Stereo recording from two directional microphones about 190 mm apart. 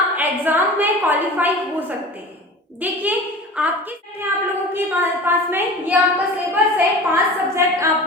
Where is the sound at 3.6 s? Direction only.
5° right (ahead or behind).